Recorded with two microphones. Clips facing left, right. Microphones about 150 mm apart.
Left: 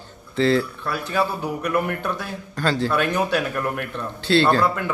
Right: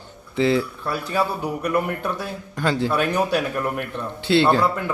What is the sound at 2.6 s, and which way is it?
A man's voice, 15° right (ahead or behind).